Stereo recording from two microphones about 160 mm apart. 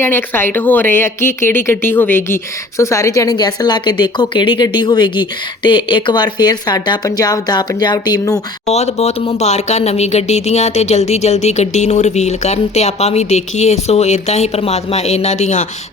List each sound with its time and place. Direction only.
0.0 s speech: 15° left (ahead or behind)
8.6 s speech: 40° left (ahead or behind)